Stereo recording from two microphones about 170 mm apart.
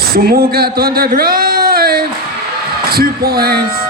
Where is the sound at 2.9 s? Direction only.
60° right (ahead or behind).